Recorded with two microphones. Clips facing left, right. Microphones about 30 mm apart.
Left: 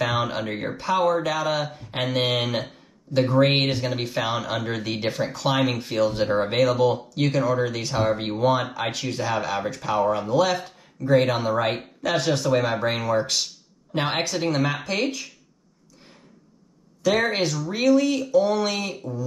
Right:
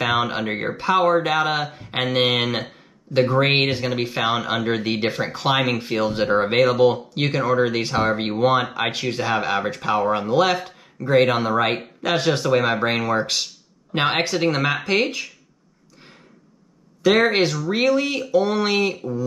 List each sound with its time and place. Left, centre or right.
0.1 s speech: right
7.2 s speech: right
7.6 s speech: right
11.4 s speech: right
13.9 s speech: right
14.3 s speech: right
14.8 s speech: right
17.0 s speech: right
18.6 s speech: right